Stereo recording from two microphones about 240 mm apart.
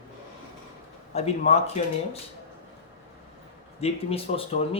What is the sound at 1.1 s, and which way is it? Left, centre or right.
Speech, left.